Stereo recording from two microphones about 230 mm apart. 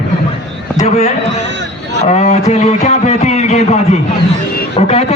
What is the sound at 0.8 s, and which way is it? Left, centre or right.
Speech, left.